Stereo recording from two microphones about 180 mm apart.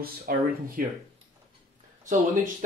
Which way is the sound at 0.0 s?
55° right (ahead or behind).